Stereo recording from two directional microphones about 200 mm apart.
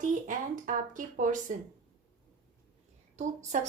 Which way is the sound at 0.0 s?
40° right (ahead or behind).